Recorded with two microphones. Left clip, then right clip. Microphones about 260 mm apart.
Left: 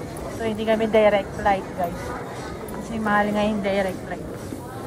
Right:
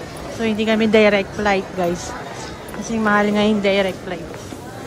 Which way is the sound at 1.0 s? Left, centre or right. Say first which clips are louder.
Right 2 dB; right.